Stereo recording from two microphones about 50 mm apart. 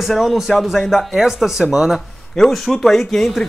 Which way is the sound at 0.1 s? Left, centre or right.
Centre.